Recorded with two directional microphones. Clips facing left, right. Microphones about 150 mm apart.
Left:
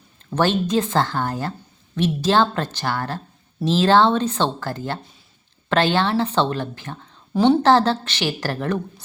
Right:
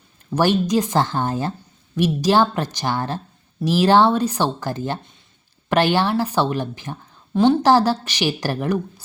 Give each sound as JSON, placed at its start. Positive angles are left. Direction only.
{"t": 0.3, "sound": "speech", "side_deg": -15}
{"t": 7.3, "sound": "a woman's voice", "side_deg": 0}
{"t": 7.6, "sound": "speech", "side_deg": -10}